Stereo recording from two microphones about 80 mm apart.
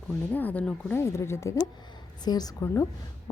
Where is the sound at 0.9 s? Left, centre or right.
Left.